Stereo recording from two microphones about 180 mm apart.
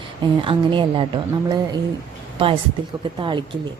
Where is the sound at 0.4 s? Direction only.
30° right (ahead or behind).